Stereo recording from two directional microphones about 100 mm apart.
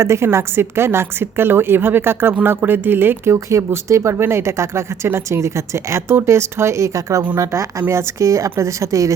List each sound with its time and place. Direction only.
0.0 s speech: 25° right (ahead or behind)